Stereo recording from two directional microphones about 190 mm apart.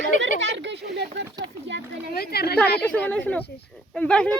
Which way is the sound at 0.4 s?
70° right (ahead or behind).